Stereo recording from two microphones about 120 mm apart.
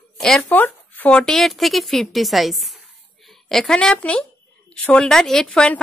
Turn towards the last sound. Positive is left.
turn(degrees=10)  # may be behind; listen again after turning